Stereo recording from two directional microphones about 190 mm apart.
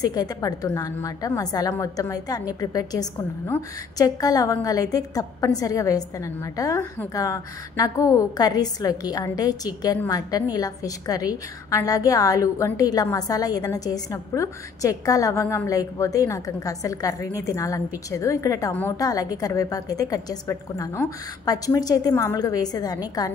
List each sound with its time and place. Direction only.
0.0 s a woman's voice: 20° left (ahead or behind)